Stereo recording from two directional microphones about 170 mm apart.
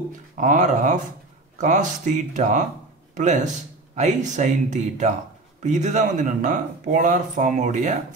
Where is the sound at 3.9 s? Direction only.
45° right (ahead or behind).